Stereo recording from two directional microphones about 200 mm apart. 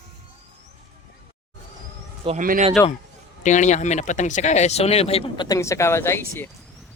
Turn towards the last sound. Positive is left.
turn(degrees=10)  # may be behind; listen again after turning